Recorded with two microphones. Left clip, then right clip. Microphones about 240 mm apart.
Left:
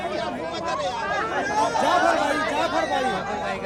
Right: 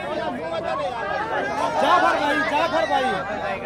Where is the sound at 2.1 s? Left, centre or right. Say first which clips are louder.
Right 2 dB; left.